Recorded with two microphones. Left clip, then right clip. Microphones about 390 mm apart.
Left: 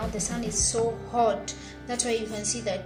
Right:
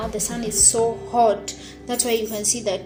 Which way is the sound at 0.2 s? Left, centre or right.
Left.